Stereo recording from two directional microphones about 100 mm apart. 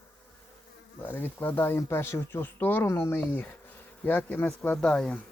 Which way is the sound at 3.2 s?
15° left (ahead or behind).